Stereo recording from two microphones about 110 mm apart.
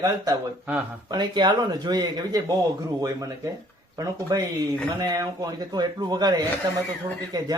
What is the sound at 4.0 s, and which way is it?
Speech, 35° right (ahead or behind).